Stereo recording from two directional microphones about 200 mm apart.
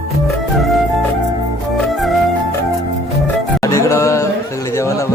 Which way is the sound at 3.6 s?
15° left (ahead or behind).